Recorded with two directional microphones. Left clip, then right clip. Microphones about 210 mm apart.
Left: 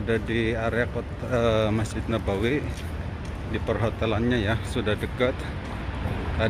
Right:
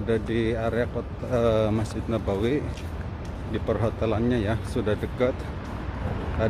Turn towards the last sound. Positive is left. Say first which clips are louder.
# even
turn(degrees=-15)  # may be behind; listen again after turning